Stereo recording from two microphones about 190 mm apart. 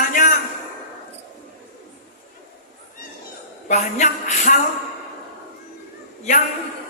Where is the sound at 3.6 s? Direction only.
40° left (ahead or behind).